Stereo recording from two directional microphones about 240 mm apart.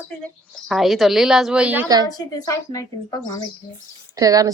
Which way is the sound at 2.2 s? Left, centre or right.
Centre.